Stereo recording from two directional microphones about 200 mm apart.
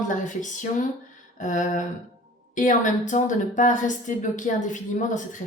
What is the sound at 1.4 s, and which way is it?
A woman's voice, 40° left (ahead or behind).